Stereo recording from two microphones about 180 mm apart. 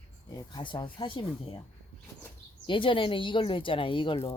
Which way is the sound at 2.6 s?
30° left (ahead or behind).